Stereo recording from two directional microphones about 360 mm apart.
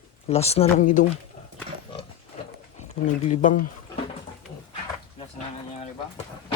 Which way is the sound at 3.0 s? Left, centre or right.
Centre.